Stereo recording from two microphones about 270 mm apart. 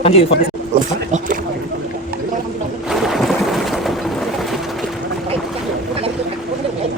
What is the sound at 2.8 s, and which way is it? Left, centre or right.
Boat, centre.